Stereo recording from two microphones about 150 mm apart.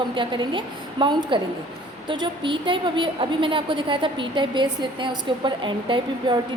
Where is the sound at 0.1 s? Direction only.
30° right (ahead or behind).